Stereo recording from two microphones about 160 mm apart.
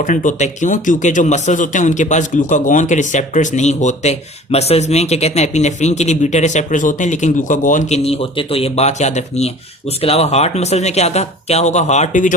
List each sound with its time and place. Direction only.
0.0 s speech: 50° left (ahead or behind)